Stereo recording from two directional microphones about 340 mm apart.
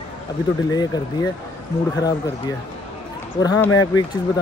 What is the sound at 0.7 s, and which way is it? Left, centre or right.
Speech, centre.